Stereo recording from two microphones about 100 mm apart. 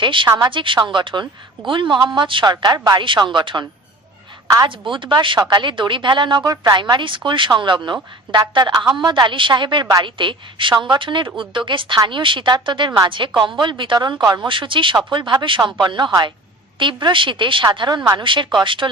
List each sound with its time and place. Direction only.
0.0 s a woman's voice: 55° right (ahead or behind); by 3.0 s 40° right (ahead or behind)
3.2 s a woman's voice: 50° right (ahead or behind)
4.4 s a woman's voice: 30° right (ahead or behind)
4.7 s a woman's voice: 55° right (ahead or behind)
6.4 s a woman's voice: 35° right (ahead or behind)
6.7 s a woman's voice: 50° right (ahead or behind)
14.4 s a woman's voice: 55° right (ahead or behind)
18.2 s a woman's voice: 55° right (ahead or behind)